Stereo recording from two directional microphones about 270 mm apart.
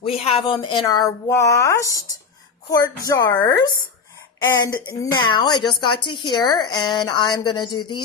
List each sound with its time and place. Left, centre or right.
0.0 s speech: centre